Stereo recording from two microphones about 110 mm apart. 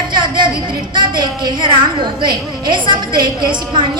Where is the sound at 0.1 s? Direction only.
45° right (ahead or behind).